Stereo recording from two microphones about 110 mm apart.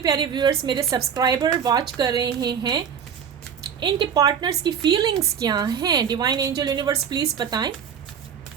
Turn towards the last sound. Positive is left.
turn(degrees=-40)  # may be behind; listen again after turning